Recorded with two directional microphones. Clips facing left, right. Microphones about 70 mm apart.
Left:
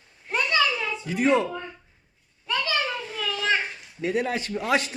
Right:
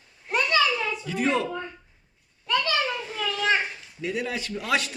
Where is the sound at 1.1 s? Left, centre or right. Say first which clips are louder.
Left 4 dB; left.